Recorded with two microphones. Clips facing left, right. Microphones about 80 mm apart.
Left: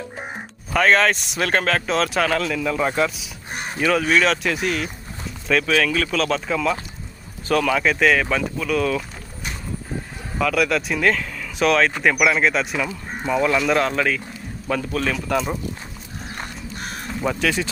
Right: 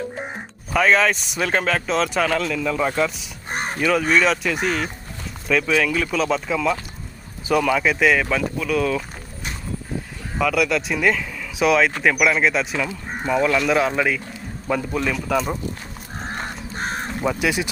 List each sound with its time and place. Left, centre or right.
0.2 s speech: centre
3.5 s crow: right
3.8 s speech: centre
9.9 s a sound: left
10.3 s speech: centre
16.1 s crow: right
17.4 s speech: centre